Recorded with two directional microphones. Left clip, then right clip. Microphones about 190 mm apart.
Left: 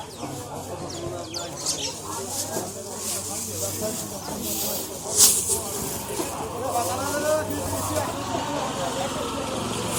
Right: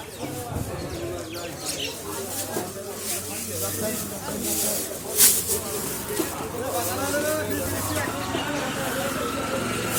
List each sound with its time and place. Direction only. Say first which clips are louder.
4.6 s speech: right 1 dB; 35° right (ahead or behind)
6.7 s vehicle: even; 55° right (ahead or behind)